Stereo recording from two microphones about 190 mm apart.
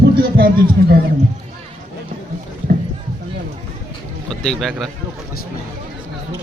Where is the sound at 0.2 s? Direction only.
50° right (ahead or behind).